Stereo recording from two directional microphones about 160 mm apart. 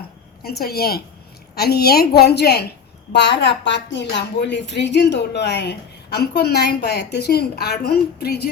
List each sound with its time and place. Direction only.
0.4 s a woman's voice: 75° left (ahead or behind)